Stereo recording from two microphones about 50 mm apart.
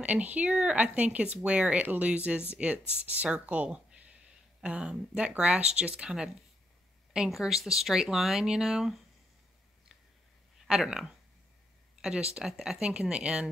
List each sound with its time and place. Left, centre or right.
0.0 s speech: right
3.5 s a sound: right
4.6 s speech: right
6.0 s speech: centre
10.7 s speech: centre
12.4 s speech: centre
12.8 s speech: centre